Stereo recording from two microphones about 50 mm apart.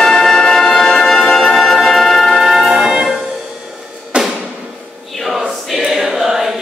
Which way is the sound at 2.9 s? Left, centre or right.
Centre.